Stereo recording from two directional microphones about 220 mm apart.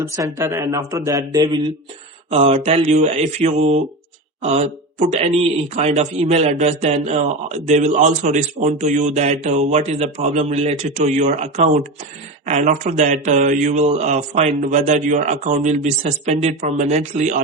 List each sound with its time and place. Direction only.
0.0 s speech: 10° right (ahead or behind)
2.3 s mantra: 25° right (ahead or behind)
4.4 s speech: 30° right (ahead or behind)